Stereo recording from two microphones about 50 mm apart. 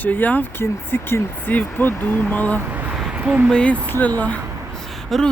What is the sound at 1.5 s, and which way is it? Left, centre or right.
Speech, left.